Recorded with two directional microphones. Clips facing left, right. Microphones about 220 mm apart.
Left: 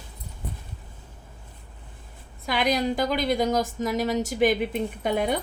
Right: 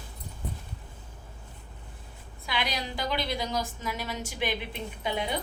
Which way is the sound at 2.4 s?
45° left (ahead or behind).